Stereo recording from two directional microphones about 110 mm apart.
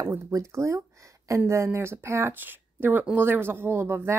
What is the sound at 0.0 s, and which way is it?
A woman's voice, 25° right (ahead or behind).